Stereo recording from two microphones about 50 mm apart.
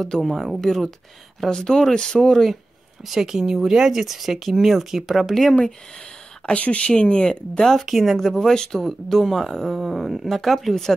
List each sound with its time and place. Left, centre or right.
0.0 s speech: centre
3.1 s speech: centre
6.4 s speech: left
7.8 s speech: centre